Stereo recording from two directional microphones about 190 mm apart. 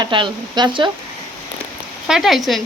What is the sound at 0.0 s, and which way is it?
Speech, 25° right (ahead or behind).